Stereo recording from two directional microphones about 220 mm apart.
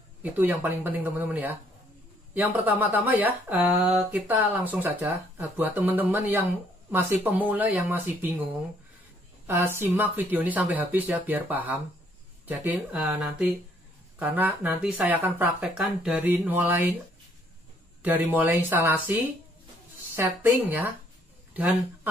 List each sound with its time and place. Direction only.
0.2 s speech: 10° right (ahead or behind)
9.5 s speech: 10° right (ahead or behind)
18.0 s speech: 10° right (ahead or behind)